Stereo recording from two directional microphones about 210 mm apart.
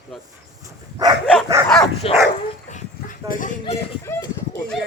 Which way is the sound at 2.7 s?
40° left (ahead or behind).